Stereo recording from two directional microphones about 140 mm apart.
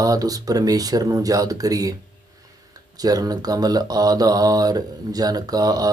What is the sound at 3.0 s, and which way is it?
Speech, 25° right (ahead or behind).